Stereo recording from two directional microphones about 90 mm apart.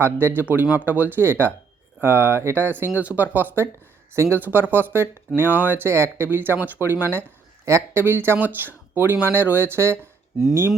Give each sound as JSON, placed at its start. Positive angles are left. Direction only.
{"t": 0.0, "sound": "speech", "side_deg": -25}